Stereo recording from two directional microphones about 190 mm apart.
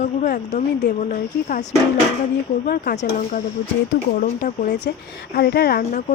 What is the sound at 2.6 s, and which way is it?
Speech, 45° left (ahead or behind).